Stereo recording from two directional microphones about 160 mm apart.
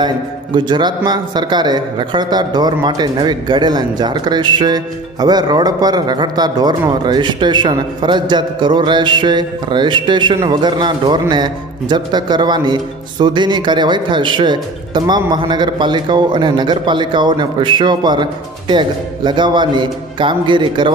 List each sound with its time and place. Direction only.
0.5 s speech: 25° right (ahead or behind)